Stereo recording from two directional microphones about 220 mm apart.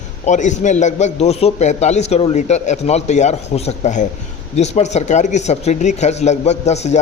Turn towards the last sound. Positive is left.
turn(degrees=30)  # may be behind; listen again after turning